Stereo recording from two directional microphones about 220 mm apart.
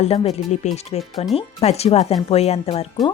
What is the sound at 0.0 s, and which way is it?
Speech, 30° left (ahead or behind).